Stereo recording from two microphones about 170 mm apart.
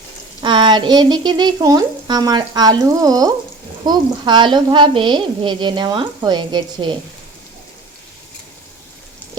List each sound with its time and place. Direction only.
0.4 s a woman's voice: 25° right (ahead or behind)